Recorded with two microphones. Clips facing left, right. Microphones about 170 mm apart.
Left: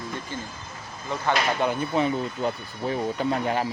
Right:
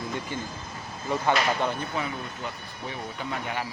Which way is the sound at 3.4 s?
35° left (ahead or behind).